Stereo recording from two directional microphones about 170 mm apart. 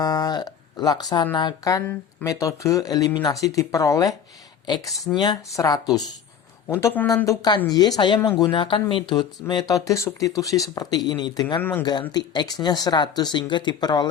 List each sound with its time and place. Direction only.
0.0 s speech: 25° left (ahead or behind)
4.9 s speech: centre (ahead or behind)
5.1 s speech: 25° left (ahead or behind)